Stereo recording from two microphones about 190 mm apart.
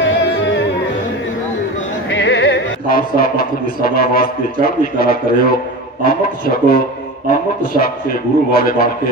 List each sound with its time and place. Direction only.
0.0 s music: 70° left (ahead or behind)
2.0 s music: 65° left (ahead or behind)
6.0 s a man's voice: 50° left (ahead or behind)